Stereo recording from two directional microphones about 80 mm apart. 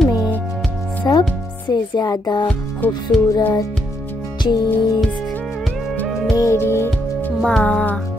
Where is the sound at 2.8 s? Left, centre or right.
Left.